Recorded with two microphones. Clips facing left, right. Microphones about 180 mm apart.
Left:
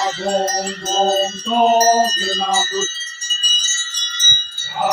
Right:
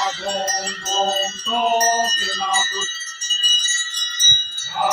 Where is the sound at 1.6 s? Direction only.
30° left (ahead or behind).